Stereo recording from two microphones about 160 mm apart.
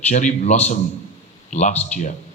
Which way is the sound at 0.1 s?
50° left (ahead or behind).